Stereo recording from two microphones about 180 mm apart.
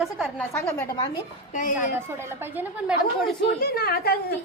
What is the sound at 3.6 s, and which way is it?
Speech, 60° left (ahead or behind).